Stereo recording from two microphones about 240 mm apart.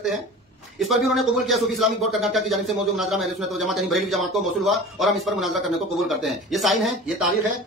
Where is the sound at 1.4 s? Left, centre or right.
Centre.